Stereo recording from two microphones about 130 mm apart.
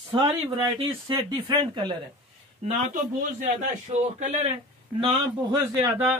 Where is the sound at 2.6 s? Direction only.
60° right (ahead or behind).